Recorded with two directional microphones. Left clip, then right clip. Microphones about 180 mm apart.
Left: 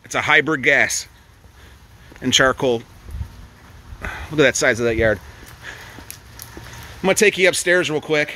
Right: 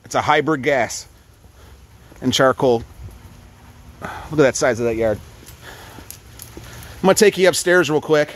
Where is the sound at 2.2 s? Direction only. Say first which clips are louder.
Even; 15° right (ahead or behind).